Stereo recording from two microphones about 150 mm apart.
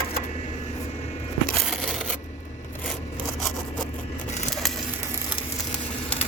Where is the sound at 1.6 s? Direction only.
Centre (ahead or behind).